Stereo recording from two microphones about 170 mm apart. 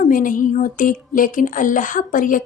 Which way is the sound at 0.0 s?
50° left (ahead or behind).